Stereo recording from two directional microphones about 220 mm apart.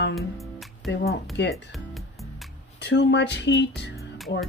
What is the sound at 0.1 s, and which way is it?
Music, centre (ahead or behind).